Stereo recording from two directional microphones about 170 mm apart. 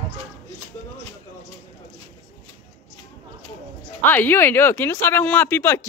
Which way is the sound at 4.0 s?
10° left (ahead or behind).